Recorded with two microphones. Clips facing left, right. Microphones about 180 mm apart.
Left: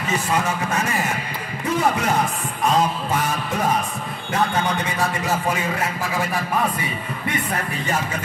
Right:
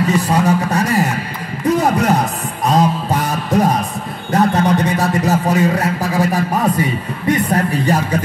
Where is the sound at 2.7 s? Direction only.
40° right (ahead or behind).